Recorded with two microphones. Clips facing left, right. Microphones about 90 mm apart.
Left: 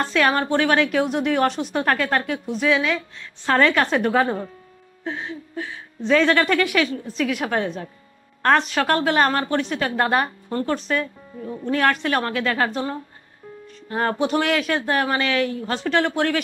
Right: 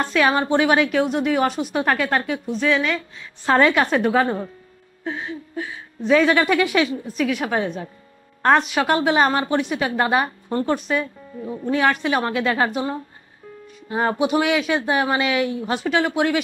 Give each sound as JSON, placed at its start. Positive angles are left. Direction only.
{"t": 0.0, "sound": "speech", "side_deg": 0}
{"t": 0.4, "sound": "a woman's voice", "side_deg": -15}
{"t": 0.8, "sound": "speech", "side_deg": 0}
{"t": 3.4, "sound": "a woman's voice", "side_deg": -15}
{"t": 3.8, "sound": "a woman's voice", "side_deg": 0}
{"t": 7.1, "sound": "a woman's voice", "side_deg": -5}
{"t": 10.5, "sound": "speech", "side_deg": -20}
{"t": 10.9, "sound": "speech", "side_deg": -10}
{"t": 12.3, "sound": "a woman's voice", "side_deg": -15}